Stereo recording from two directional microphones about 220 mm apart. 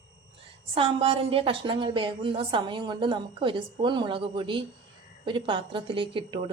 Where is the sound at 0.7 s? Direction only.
25° right (ahead or behind).